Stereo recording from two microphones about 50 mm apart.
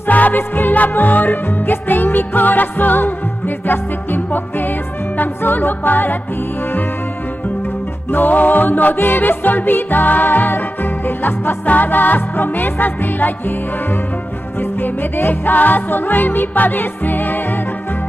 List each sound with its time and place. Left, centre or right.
0.0 s music: left
8.1 s music: left
14.6 s music: left